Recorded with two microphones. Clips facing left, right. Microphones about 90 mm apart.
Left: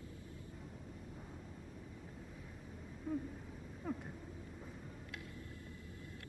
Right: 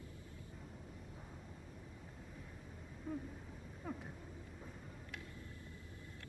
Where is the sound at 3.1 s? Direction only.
Centre (ahead or behind).